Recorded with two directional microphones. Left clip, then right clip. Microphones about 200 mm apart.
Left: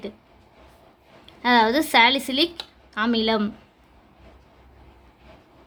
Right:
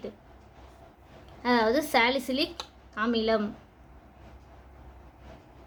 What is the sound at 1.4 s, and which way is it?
A woman's voice, 55° left (ahead or behind).